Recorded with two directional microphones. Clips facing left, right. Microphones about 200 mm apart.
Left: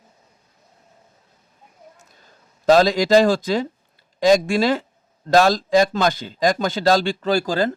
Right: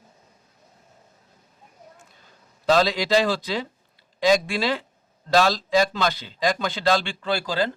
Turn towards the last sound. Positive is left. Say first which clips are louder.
# left 5 dB
turn(degrees=45)  # may be behind; listen again after turning